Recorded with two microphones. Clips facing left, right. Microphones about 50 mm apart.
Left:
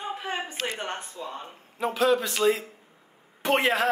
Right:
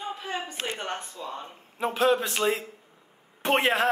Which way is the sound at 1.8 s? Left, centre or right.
Right.